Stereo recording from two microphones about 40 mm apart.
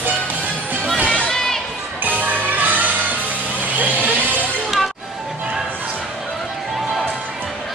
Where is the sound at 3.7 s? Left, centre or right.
Right.